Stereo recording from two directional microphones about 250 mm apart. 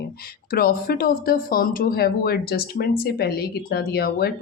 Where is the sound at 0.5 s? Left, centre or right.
Left.